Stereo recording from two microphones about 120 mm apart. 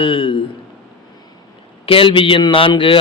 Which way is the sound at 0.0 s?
45° left (ahead or behind).